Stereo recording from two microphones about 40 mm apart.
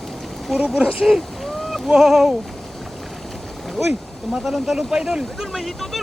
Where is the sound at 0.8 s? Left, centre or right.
Right.